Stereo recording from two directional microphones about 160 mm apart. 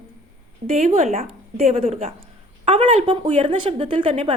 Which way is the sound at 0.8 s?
45° right (ahead or behind).